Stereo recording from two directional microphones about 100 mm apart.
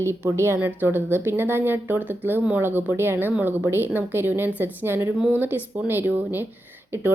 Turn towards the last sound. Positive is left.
turn(degrees=-25)  # may be behind; listen again after turning